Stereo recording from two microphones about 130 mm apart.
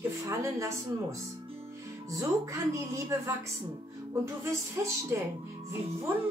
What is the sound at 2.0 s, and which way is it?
A woman's voice, 25° right (ahead or behind).